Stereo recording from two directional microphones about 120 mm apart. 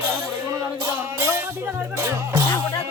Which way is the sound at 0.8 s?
25° right (ahead or behind).